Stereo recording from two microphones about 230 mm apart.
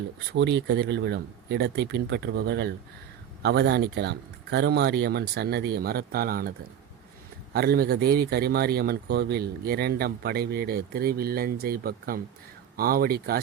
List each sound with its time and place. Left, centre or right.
0.3 s speech: right
7.5 s speech: right